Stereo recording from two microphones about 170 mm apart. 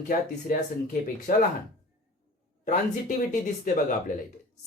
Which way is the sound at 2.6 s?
50° left (ahead or behind).